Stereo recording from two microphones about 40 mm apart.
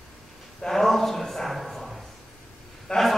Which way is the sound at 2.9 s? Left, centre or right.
Left.